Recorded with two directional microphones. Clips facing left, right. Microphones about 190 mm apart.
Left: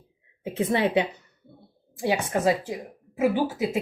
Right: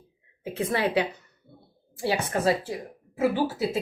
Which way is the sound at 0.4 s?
25° left (ahead or behind).